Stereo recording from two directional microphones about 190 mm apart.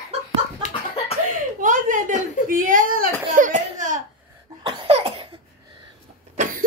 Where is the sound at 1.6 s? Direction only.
45° right (ahead or behind).